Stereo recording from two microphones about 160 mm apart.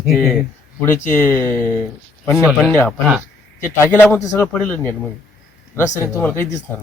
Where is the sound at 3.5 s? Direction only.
15° left (ahead or behind).